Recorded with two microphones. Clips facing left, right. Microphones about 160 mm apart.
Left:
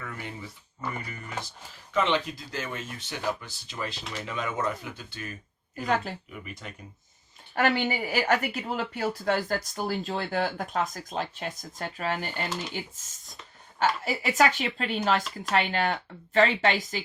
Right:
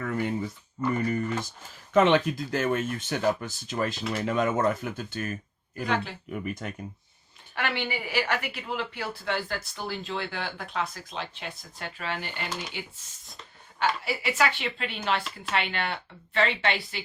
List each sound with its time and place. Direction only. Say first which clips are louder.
0.0 s speech: right 10 dB; 50° right (ahead or behind)
5.8 s speech: left 1 dB; 45° left (ahead or behind)
6.3 s speech: right 9 dB; 45° right (ahead or behind)
7.5 s speech: left 5 dB; 40° left (ahead or behind)
13.7 s speech: left 1 dB; 40° left (ahead or behind)